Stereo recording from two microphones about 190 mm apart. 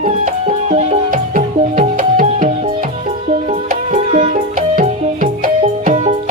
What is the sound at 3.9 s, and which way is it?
Music, 35° right (ahead or behind).